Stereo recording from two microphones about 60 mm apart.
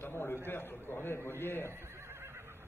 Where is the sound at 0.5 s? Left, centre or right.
Left.